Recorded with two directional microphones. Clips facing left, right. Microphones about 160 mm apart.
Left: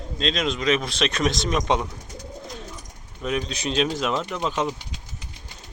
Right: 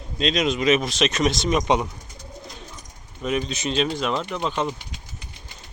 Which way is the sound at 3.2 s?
Centre (ahead or behind).